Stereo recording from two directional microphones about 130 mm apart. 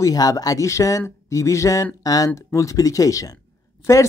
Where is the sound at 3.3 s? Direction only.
20° left (ahead or behind).